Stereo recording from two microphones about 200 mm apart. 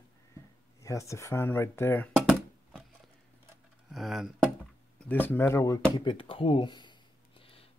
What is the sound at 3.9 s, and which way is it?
Speech, centre (ahead or behind).